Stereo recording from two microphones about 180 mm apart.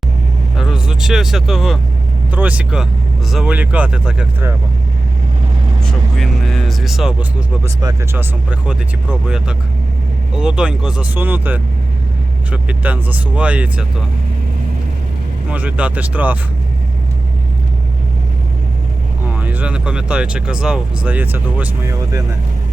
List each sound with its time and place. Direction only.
0.5 s speech: 5° right (ahead or behind)
5.8 s vehicle: centre (ahead or behind)
7.6 s speech: 20° right (ahead or behind)
15.4 s speech: 10° right (ahead or behind)
19.4 s speech: 10° right (ahead or behind)